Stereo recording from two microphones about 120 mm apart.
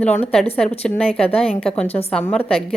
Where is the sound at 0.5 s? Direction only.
10° left (ahead or behind).